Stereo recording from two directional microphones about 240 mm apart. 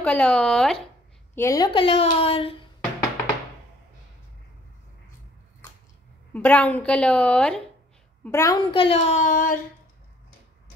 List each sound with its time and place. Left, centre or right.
0.0 s a woman's voice: centre
1.3 s a woman's voice: centre
6.3 s a woman's voice: centre; by 9.6 s left